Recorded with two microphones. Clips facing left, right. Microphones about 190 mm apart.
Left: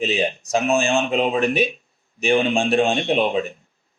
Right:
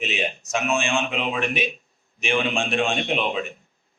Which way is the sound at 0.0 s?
35° left (ahead or behind).